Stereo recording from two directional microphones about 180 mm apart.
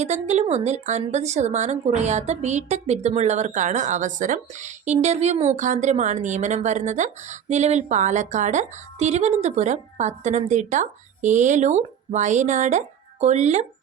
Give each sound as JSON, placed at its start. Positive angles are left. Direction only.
{"t": 0.0, "sound": "a woman's voice", "side_deg": -40}